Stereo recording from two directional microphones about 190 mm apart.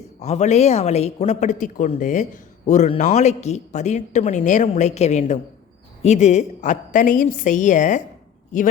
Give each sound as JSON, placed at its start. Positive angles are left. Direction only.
{"t": 0.2, "sound": "speech", "side_deg": 35}